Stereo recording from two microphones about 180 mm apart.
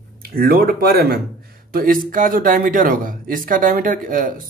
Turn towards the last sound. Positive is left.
turn(degrees=-50)  # may be behind; listen again after turning